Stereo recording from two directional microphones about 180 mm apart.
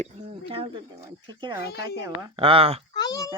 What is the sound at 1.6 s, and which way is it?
Speech, 65° left (ahead or behind).